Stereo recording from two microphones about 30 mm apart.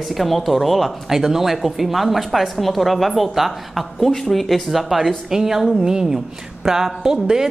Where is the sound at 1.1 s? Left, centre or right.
Centre.